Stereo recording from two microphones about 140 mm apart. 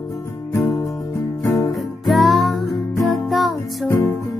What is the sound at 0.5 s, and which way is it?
Music, 20° left (ahead or behind).